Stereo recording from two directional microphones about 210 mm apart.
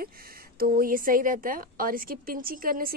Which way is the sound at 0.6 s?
45° right (ahead or behind).